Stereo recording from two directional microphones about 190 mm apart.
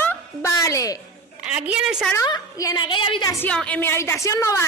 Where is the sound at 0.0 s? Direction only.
15° left (ahead or behind).